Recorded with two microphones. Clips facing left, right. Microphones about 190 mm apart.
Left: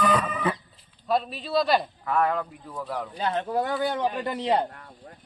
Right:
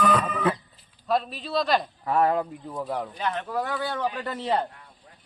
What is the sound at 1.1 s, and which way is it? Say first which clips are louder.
Music: left 1 dB; centre (ahead or behind).